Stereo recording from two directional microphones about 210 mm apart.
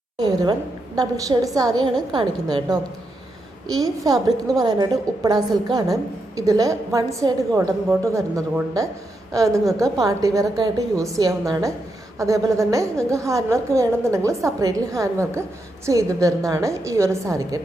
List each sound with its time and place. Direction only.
0.2 s a woman's voice: 20° right (ahead or behind)